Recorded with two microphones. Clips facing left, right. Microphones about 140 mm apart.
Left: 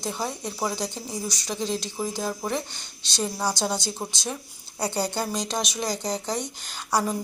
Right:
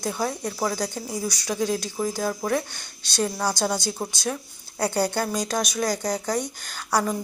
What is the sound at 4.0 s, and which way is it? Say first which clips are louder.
Speech: right 3 dB; 5° left (ahead or behind).